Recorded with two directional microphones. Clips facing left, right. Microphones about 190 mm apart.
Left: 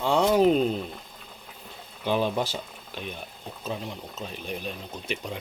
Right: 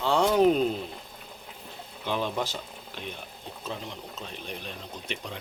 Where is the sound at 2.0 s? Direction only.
15° left (ahead or behind).